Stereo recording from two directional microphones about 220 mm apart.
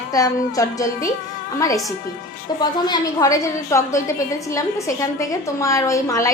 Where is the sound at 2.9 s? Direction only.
15° left (ahead or behind).